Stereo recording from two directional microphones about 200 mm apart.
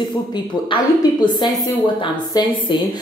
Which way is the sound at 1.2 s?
20° left (ahead or behind).